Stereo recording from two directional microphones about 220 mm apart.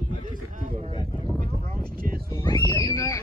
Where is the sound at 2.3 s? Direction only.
15° left (ahead or behind).